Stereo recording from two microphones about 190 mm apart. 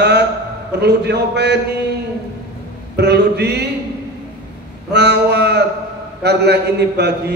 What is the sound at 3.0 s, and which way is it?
Speech, 60° right (ahead or behind).